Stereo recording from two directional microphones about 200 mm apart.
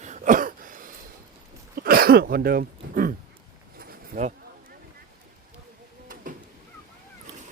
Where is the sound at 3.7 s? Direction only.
40° right (ahead or behind).